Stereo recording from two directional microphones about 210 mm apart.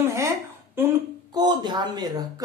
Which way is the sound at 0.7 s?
15° right (ahead or behind).